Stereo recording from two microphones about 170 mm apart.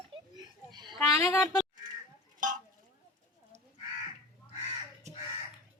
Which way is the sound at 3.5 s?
40° right (ahead or behind).